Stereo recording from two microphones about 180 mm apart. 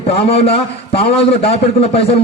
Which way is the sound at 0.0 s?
35° left (ahead or behind).